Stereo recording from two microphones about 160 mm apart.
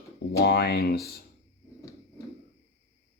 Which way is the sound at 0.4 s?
90° left.